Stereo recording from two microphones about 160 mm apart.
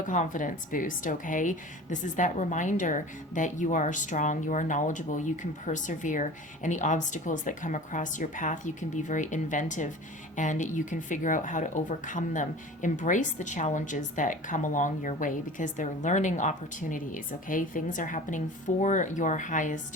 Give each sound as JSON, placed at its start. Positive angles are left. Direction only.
{"t": 0.0, "sound": "speech", "side_deg": 55}